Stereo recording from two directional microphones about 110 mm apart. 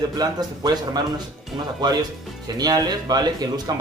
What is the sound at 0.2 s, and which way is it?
Speech, 40° right (ahead or behind).